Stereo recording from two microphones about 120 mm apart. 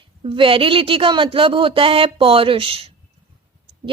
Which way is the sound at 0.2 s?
45° right (ahead or behind).